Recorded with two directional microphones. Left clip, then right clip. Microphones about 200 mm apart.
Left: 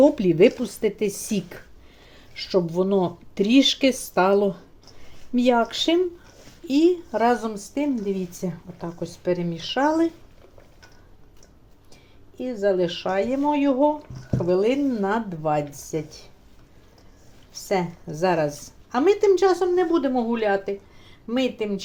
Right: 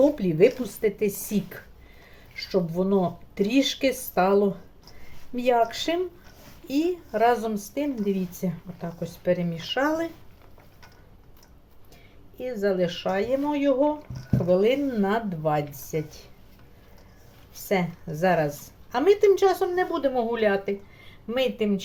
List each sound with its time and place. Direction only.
0.0 s speech: 30° left (ahead or behind)
12.4 s speech: 20° left (ahead or behind)
17.5 s a woman's voice: 20° left (ahead or behind)